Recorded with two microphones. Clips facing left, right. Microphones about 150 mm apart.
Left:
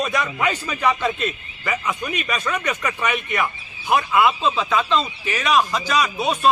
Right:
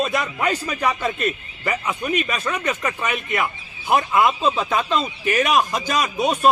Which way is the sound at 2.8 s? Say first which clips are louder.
Left 1 dB; 25° right (ahead or behind).